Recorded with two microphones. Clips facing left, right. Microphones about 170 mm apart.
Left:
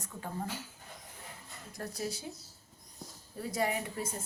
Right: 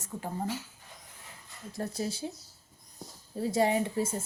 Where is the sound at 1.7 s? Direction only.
25° right (ahead or behind).